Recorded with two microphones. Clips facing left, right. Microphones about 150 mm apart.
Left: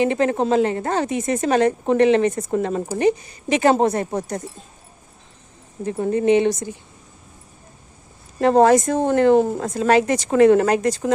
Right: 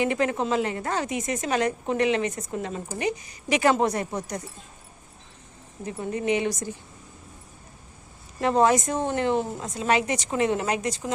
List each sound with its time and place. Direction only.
0.0 s a woman's voice: 30° left (ahead or behind)
2.5 s a woman's voice: 50° left (ahead or behind)
3.0 s a woman's voice: 30° left (ahead or behind)
4.1 s a woman's voice: 50° left (ahead or behind)
5.8 s a woman's voice: 50° left (ahead or behind)
6.1 s a woman's voice: 30° left (ahead or behind)
8.4 s a woman's voice: 40° left (ahead or behind)